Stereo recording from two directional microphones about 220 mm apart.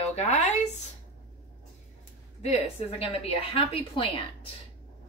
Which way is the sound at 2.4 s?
25° left (ahead or behind).